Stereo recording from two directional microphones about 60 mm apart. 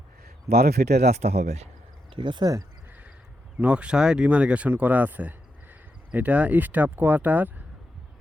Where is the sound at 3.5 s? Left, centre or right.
Centre.